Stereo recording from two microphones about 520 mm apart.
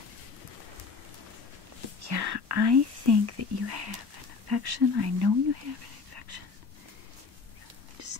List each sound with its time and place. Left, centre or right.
2.0 s speech: right
6.1 s a sound: right
8.0 s whispering: right